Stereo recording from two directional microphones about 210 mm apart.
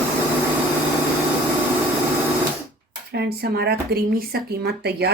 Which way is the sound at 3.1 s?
50° right (ahead or behind).